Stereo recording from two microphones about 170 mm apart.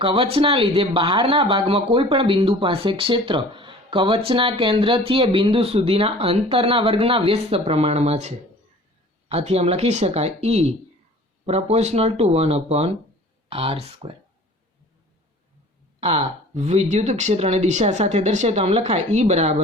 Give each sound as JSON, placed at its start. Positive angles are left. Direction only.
{"t": 0.0, "sound": "speech", "side_deg": -35}
{"t": 16.0, "sound": "speech", "side_deg": -35}